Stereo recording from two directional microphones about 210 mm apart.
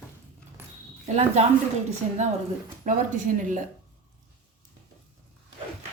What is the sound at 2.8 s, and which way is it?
Speech, 35° right (ahead or behind).